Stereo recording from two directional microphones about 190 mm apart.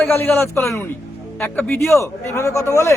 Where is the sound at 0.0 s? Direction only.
10° left (ahead or behind).